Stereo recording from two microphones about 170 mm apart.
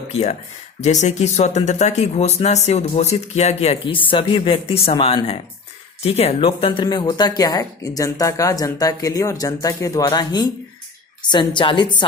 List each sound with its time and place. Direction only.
0.1 s speech: 40° left (ahead or behind)